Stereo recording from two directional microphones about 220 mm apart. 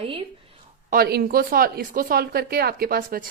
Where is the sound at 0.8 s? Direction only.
45° right (ahead or behind).